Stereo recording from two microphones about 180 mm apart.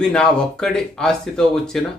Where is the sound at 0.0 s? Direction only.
5° left (ahead or behind).